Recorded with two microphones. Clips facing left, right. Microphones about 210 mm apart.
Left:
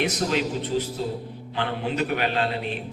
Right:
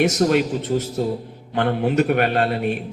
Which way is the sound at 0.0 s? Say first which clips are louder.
Right 7 dB; 45° right (ahead or behind).